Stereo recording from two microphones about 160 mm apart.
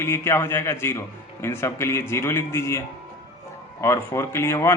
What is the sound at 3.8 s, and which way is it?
Speech, 15° left (ahead or behind).